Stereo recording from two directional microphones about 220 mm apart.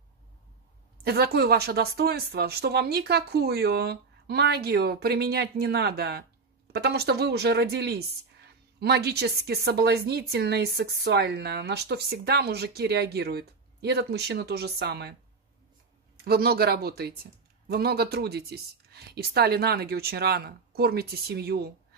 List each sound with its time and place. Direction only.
1.0 s speech: 45° right (ahead or behind)
16.3 s speech: 45° right (ahead or behind)